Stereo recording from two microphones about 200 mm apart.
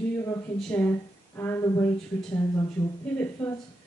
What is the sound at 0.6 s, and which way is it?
A woman's voice, 5° left (ahead or behind).